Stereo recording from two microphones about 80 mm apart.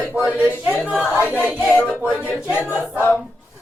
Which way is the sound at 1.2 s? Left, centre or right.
Right.